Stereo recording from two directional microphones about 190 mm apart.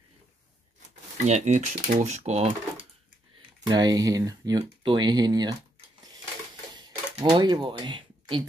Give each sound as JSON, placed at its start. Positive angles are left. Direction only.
{"t": 1.1, "sound": "speech", "side_deg": -40}
{"t": 3.6, "sound": "speech", "side_deg": -20}
{"t": 7.2, "sound": "speech", "side_deg": -25}